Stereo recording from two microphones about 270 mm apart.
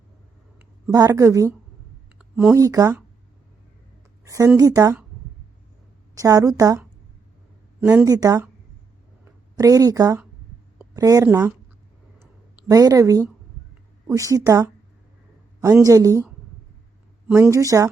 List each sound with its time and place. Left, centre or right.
0.9 s speech: centre
4.2 s speech: centre
6.1 s speech: centre
12.2 s a sound: centre
14.1 s speech: centre
17.2 s speech: centre